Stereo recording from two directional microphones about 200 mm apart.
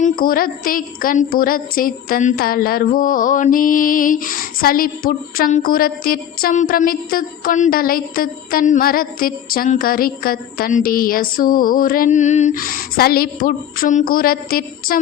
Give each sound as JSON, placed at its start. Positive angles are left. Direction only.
{"t": 0.0, "sound": "a woman's voice", "side_deg": 45}